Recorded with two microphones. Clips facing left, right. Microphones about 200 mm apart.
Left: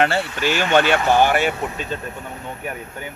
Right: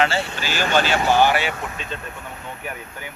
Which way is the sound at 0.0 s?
60° left (ahead or behind).